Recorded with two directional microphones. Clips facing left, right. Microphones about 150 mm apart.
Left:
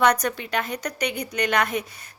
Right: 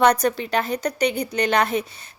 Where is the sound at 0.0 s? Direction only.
30° right (ahead or behind).